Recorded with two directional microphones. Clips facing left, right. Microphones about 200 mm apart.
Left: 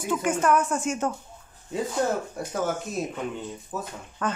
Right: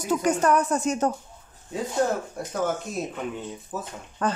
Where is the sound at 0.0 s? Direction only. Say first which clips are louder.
Right 2 dB; 40° right (ahead or behind).